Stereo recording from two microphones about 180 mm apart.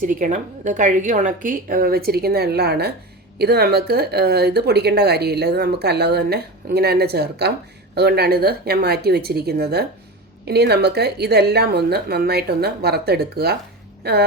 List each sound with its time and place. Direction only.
0.0 s a woman's voice: 45° right (ahead or behind); by 14.3 s 65° right (ahead or behind)